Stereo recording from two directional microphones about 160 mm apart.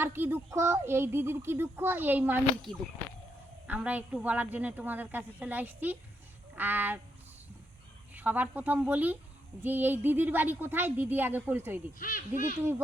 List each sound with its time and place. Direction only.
0.0 s speech: 15° right (ahead or behind)
3.7 s speech: 10° right (ahead or behind)
8.1 s speech: 10° right (ahead or behind)
11.9 s speech: 60° left (ahead or behind)